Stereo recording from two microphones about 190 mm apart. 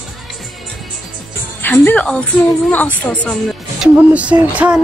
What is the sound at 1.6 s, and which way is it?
A woman's voice, 10° left (ahead or behind).